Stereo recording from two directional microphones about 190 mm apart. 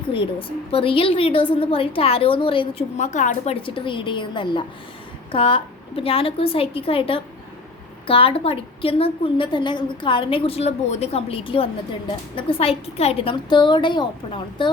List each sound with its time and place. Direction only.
0.1 s a woman's voice: 30° left (ahead or behind)